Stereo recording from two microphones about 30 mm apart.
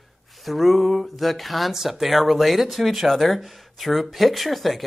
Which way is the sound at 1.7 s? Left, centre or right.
Centre.